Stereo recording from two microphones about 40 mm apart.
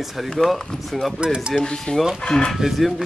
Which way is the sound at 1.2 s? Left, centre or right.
Right.